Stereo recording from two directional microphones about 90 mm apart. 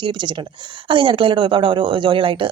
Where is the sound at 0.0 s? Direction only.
60° right (ahead or behind).